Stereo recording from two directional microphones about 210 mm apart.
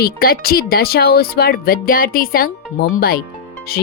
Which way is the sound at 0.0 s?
45° left (ahead or behind).